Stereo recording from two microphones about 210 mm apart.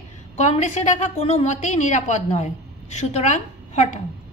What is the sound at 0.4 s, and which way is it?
A woman's voice, 35° left (ahead or behind).